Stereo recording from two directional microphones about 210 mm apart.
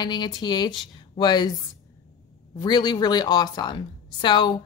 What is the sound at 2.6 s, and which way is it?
A woman's voice, 20° left (ahead or behind).